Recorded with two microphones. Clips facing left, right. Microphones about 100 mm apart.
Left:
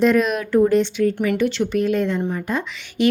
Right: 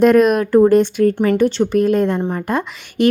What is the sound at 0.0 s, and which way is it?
A woman's voice, 50° right (ahead or behind).